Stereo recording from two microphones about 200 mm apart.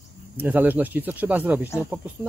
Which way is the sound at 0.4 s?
10° right (ahead or behind).